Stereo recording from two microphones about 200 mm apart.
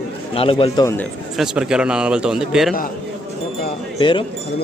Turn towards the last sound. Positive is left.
turn(degrees=25)  # may be behind; listen again after turning